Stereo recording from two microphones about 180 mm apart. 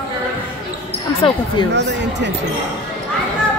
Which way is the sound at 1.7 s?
75° right (ahead or behind).